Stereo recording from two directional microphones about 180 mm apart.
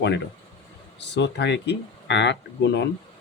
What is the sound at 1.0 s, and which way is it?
Speech, 75° left (ahead or behind).